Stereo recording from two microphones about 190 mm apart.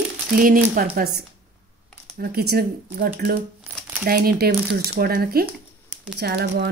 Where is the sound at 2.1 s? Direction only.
55° right (ahead or behind).